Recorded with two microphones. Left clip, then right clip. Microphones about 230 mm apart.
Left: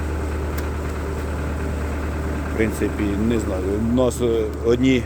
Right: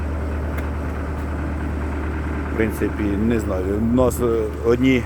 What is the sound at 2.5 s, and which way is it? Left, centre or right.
Speech, centre.